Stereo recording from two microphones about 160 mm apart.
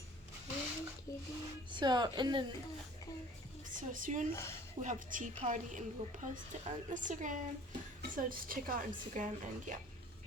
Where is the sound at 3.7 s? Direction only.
55° right (ahead or behind).